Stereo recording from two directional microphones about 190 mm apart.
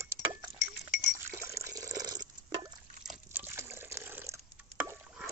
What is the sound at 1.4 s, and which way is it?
Water, 15° right (ahead or behind).